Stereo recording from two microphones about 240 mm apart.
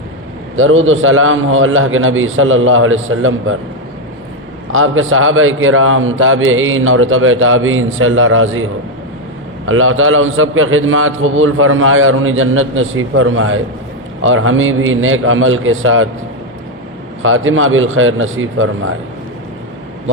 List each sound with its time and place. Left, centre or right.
0.5 s a man's voice: right
4.7 s a man's voice: right
17.2 s a man's voice: right